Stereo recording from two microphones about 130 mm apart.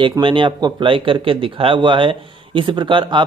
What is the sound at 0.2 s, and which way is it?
Speech, 40° right (ahead or behind).